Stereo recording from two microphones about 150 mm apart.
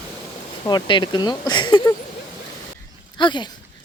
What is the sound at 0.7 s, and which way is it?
Speech, 30° left (ahead or behind).